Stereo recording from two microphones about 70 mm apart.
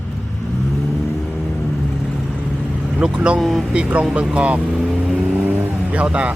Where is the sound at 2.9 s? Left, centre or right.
Centre.